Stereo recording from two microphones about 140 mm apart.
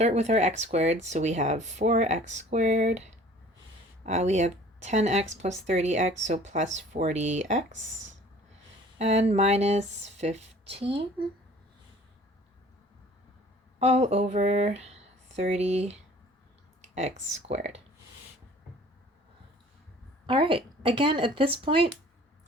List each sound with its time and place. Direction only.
0.0 s speech: 50° right (ahead or behind)
9.0 s speech: 50° right (ahead or behind)
13.7 s speech: 50° right (ahead or behind)
20.2 s a woman's voice: 35° right (ahead or behind)